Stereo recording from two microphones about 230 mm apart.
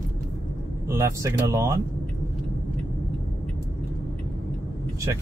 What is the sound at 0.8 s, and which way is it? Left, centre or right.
Speech, centre.